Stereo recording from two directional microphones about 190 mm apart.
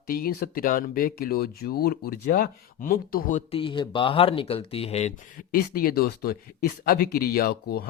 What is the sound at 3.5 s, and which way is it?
Speech, 25° left (ahead or behind).